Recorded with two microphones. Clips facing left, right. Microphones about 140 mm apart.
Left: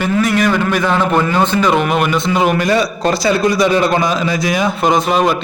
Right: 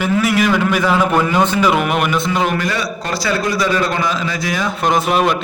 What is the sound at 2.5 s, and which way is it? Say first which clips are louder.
A man's voice: left 6 dB; 20° left (ahead or behind).